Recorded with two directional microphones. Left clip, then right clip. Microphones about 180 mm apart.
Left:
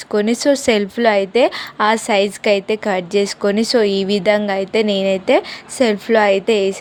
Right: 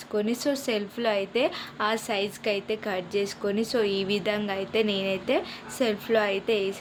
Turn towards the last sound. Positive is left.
turn(degrees=40)  # may be behind; listen again after turning